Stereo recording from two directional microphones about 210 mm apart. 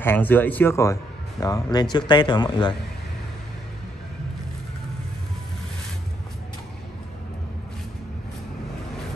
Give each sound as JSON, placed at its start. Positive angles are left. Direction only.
{"t": 0.0, "sound": "speech", "side_deg": 10}